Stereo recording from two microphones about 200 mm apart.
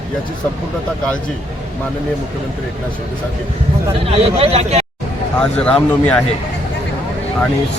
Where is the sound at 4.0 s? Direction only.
30° right (ahead or behind).